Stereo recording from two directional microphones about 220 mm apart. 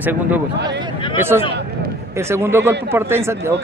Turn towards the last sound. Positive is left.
turn(degrees=-10)  # may be behind; listen again after turning